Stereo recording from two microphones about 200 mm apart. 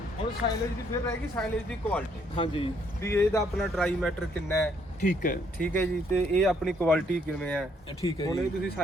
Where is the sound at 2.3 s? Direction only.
25° left (ahead or behind).